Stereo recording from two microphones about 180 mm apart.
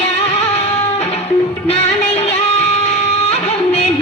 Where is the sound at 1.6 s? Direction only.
35° left (ahead or behind).